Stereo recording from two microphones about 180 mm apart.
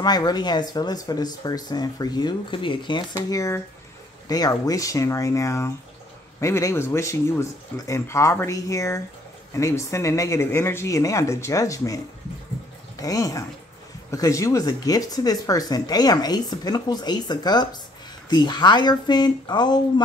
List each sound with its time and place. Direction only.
0.0 s speech: 20° left (ahead or behind)